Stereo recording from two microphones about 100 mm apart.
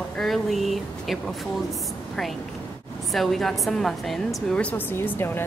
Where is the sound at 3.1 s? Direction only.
Centre (ahead or behind).